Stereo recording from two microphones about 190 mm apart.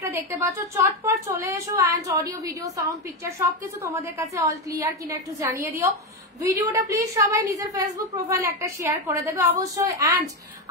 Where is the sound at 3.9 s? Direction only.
15° right (ahead or behind).